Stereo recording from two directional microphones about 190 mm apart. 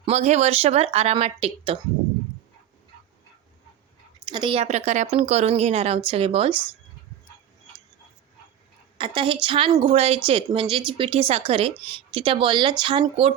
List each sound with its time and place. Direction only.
0.0 s speech: 35° right (ahead or behind)
4.3 s speech: 25° right (ahead or behind)
9.0 s speech: 25° right (ahead or behind)